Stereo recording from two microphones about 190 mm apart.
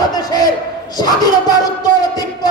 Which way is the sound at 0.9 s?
20° left (ahead or behind).